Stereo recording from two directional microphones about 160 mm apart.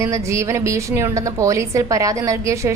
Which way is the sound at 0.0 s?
20° right (ahead or behind).